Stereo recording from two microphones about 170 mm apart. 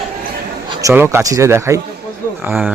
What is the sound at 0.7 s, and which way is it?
Speech, 20° right (ahead or behind).